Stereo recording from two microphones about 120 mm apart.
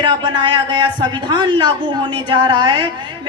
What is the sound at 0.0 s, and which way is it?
A woman's voice, 35° right (ahead or behind).